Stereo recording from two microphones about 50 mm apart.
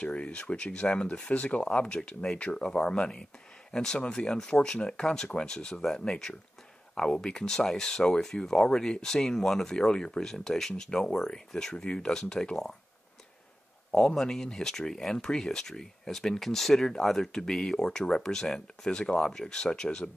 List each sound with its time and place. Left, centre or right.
0.0 s speech: left
14.1 s speech: centre